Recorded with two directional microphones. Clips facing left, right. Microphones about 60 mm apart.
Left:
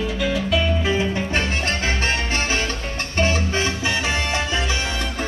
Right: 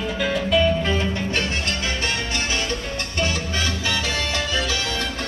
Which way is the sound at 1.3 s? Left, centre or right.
Left.